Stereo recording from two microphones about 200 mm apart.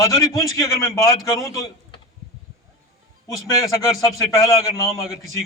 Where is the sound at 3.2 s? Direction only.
15° left (ahead or behind).